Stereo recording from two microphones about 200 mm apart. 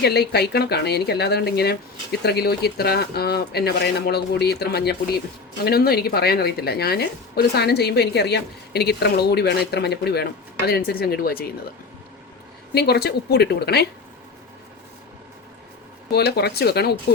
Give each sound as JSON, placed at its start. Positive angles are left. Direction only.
{"t": 0.0, "sound": "a woman's voice", "side_deg": 55}
{"t": 12.7, "sound": "a woman's voice", "side_deg": 55}
{"t": 16.1, "sound": "a woman's voice", "side_deg": 55}